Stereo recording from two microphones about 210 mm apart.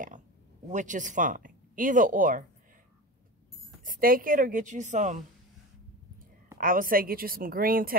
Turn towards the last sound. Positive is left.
turn(degrees=-45)  # may be behind; listen again after turning